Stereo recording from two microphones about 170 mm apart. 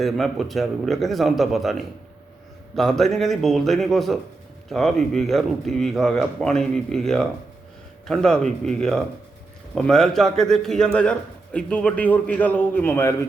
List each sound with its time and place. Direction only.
0.0 s a man's voice: centre (ahead or behind)